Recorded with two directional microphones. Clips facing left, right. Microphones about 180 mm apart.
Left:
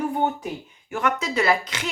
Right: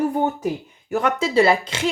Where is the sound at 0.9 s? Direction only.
30° right (ahead or behind).